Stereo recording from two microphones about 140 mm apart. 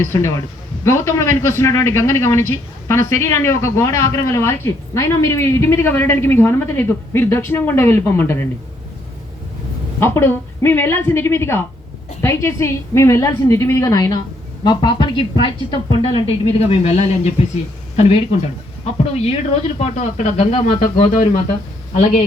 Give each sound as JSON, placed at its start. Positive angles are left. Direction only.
{"t": 0.0, "sound": "a man's voice", "side_deg": 20}
{"t": 10.0, "sound": "a woman's voice", "side_deg": 15}
{"t": 19.2, "sound": "speech", "side_deg": 50}
{"t": 21.9, "sound": "speech", "side_deg": 55}